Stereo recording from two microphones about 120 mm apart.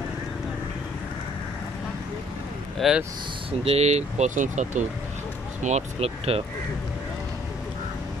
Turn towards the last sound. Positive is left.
turn(degrees=-55)  # may be behind; listen again after turning